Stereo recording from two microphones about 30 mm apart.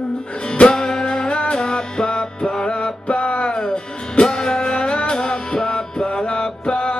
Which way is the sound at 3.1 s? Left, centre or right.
Left.